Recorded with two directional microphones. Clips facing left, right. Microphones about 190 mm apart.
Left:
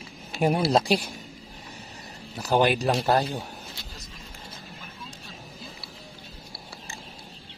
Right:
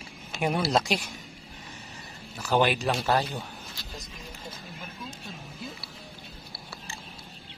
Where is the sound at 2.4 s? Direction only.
40° left (ahead or behind).